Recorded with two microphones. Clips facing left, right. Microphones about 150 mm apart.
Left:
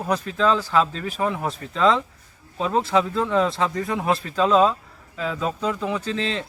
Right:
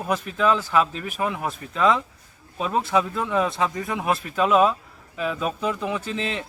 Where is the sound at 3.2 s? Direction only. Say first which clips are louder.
Left 2 dB; 5° right (ahead or behind).